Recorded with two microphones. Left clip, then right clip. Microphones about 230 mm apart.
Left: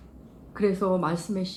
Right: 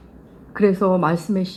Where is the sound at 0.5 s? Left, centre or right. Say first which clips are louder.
Right 7 dB; right.